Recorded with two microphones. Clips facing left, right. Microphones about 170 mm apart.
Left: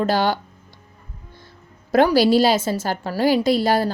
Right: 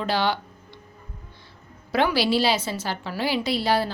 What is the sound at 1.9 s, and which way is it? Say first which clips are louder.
A woman's voice: left 7 dB; 45° left (ahead or behind).